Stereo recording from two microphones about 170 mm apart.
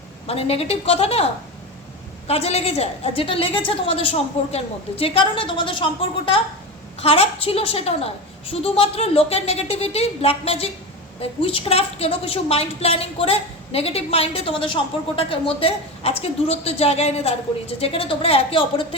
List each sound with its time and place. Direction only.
0.3 s a woman's voice: 35° left (ahead or behind)